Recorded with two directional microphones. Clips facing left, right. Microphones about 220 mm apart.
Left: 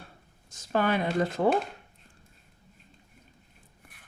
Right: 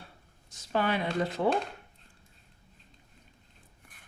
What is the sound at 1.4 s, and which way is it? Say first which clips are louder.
Speech: left 3 dB; 45° left (ahead or behind).